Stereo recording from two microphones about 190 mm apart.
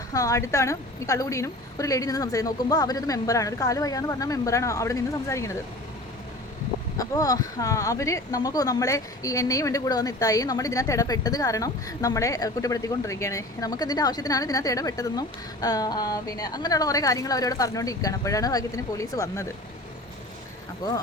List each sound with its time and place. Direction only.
0.1 s a woman's voice: 15° left (ahead or behind)
6.9 s speech: 20° left (ahead or behind)